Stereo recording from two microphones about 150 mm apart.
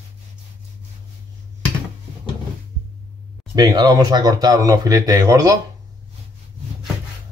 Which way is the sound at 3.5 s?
25° right (ahead or behind).